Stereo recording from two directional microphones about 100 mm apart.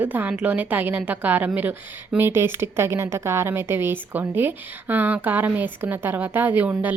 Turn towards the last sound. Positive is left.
turn(degrees=-15)  # may be behind; listen again after turning